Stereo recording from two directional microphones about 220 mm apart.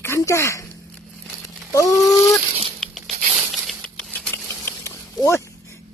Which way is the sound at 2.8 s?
Centre (ahead or behind).